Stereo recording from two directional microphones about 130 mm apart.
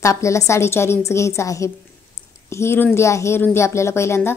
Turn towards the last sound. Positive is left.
turn(degrees=20)  # may be behind; listen again after turning